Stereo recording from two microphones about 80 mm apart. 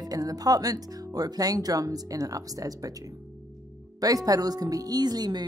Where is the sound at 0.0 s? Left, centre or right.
Right.